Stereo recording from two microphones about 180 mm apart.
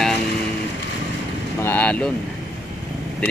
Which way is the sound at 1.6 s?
10° left (ahead or behind).